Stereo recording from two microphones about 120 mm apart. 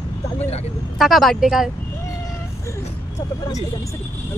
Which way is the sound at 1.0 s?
Centre (ahead or behind).